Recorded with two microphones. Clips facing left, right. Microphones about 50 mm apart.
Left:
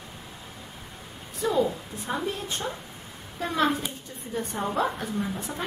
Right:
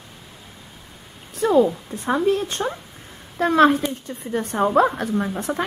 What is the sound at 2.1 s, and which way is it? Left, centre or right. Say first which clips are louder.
Speech: right 10 dB; right.